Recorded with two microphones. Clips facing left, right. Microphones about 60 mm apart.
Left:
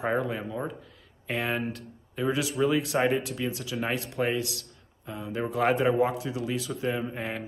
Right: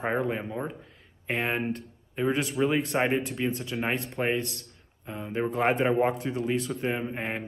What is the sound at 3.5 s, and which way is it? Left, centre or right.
Speech, right.